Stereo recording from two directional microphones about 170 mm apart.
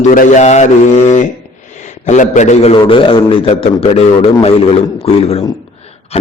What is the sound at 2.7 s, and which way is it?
Speech, 30° left (ahead or behind).